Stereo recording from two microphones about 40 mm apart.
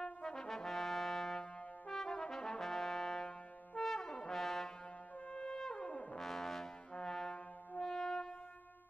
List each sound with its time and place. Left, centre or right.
0.0 s brass instrument: centre
5.3 s brass instrument: centre
6.1 s brass instrument: centre
6.9 s brass instrument: centre